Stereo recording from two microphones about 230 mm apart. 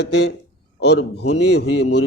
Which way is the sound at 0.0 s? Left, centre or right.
Left.